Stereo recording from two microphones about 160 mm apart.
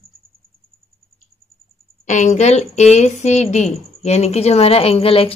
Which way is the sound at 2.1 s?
50° left (ahead or behind).